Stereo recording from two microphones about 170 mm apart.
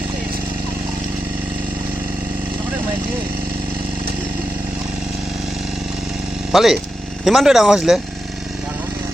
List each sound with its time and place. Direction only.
6.5 s speech: centre (ahead or behind)